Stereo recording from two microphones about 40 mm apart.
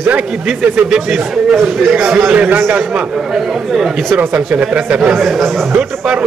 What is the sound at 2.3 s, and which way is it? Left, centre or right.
Speech, right.